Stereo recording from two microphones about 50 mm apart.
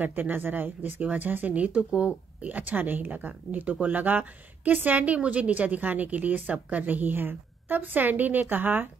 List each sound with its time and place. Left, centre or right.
0.0 s a woman's voice: right